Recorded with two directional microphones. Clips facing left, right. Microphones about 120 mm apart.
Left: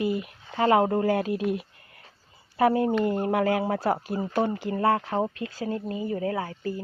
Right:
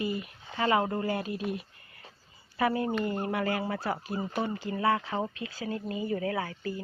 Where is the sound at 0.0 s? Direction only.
90° left.